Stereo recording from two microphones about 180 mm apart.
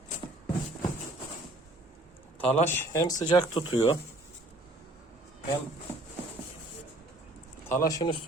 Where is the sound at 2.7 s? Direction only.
20° left (ahead or behind).